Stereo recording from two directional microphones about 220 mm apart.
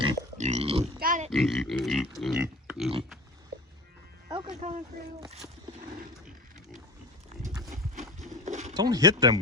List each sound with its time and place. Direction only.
0.3 s grunt: 30° right (ahead or behind)
0.9 s grunt: 40° right (ahead or behind)
1.3 s pig: centre (ahead or behind)
4.3 s speech: 25° right (ahead or behind)
8.2 s a sound: 35° right (ahead or behind)
8.7 s speech: 15° right (ahead or behind)